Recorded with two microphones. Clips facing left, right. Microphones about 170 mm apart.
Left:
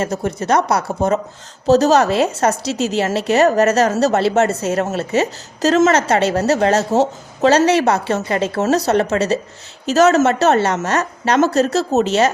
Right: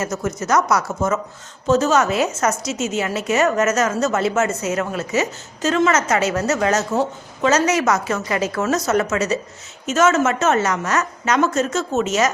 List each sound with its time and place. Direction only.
0.0 s a woman's voice: 30° left (ahead or behind)